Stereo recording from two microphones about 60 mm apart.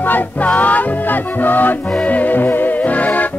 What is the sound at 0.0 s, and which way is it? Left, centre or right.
Music, left.